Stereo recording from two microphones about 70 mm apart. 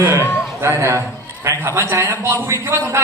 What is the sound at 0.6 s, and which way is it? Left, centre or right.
A man's voice, right.